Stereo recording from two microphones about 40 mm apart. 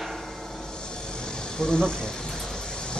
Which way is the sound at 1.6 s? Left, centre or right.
Centre.